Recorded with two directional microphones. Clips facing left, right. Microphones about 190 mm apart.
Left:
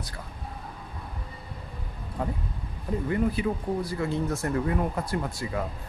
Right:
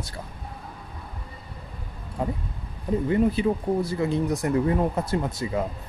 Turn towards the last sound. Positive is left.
turn(degrees=-20)  # may be behind; listen again after turning